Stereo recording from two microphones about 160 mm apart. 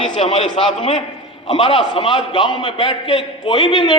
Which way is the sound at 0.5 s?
35° left (ahead or behind).